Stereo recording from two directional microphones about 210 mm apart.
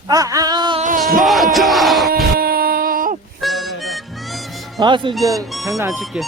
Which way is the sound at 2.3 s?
45° right (ahead or behind).